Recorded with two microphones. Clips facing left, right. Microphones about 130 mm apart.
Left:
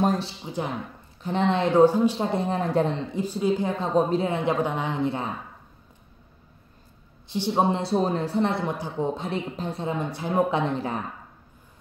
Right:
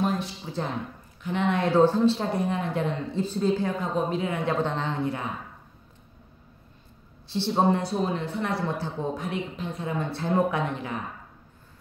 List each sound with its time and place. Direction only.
0.0 s a sound: 40° left (ahead or behind)
0.5 s a woman's voice: 15° left (ahead or behind)
1.2 s speech: 35° left (ahead or behind); by 2.2 s 15° left (ahead or behind)
2.3 s speech: 30° left (ahead or behind)
3.1 s a woman's voice: 10° left (ahead or behind)
3.7 s speech: 30° left (ahead or behind)
4.6 s a woman's voice: 10° left (ahead or behind)
7.2 s speech: 15° left (ahead or behind)
7.7 s speech: 30° left (ahead or behind); by 9.1 s 15° left (ahead or behind)
9.1 s speech: 30° left (ahead or behind)
10.0 s a woman's voice: 15° left (ahead or behind)
10.5 s speech: 30° left (ahead or behind)